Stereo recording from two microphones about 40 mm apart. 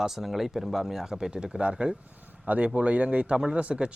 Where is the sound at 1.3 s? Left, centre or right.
Right.